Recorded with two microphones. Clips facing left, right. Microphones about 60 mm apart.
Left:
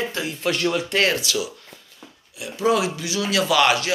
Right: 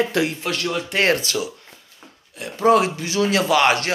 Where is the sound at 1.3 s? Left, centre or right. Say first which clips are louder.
Even; right.